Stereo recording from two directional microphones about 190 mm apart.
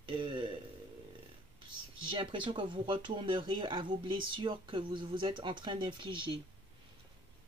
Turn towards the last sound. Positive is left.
turn(degrees=-25)  # may be behind; listen again after turning